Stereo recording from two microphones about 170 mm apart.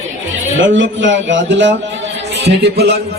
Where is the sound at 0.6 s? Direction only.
90° right.